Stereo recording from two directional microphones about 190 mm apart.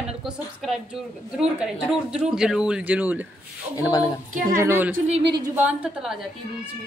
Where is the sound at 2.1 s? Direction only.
5° right (ahead or behind).